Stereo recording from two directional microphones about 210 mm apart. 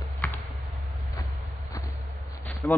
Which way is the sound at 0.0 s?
10° left (ahead or behind).